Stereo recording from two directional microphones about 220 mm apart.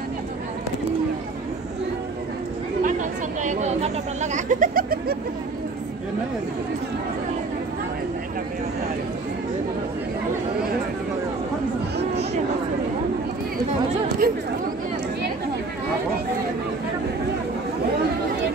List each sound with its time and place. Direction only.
2.8 s chatter: 35° right (ahead or behind)
14.2 s speech: 45° right (ahead or behind)